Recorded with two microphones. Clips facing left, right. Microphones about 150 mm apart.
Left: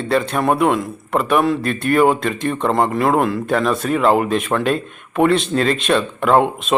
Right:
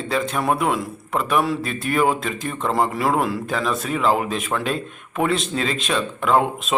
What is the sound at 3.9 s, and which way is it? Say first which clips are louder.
Speech: left 5 dB; 55° left (ahead or behind).